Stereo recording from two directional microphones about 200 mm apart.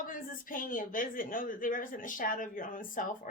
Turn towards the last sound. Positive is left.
turn(degrees=45)  # may be behind; listen again after turning